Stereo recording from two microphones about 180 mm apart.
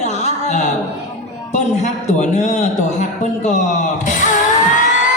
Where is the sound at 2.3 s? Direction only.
40° left (ahead or behind).